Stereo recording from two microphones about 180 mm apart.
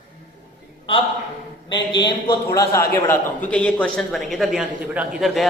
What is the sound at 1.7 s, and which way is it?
A man's voice, 25° left (ahead or behind).